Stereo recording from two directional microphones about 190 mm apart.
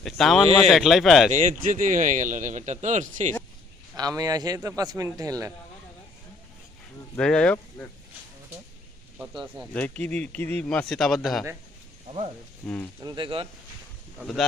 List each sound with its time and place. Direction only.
0.0 s speech: centre (ahead or behind)
1.3 s a man's voice: 40° right (ahead or behind)
3.9 s speech: 20° right (ahead or behind)
7.2 s speech: 5° left (ahead or behind)
9.7 s speech: 10° left (ahead or behind)
12.6 s speech: 5° left (ahead or behind)
13.0 s speech: 20° right (ahead or behind)
14.2 s speech: centre (ahead or behind)